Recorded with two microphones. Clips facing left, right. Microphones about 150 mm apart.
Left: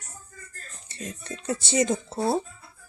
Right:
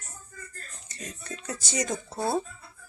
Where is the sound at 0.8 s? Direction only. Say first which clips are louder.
Left 4 dB; 30° left (ahead or behind).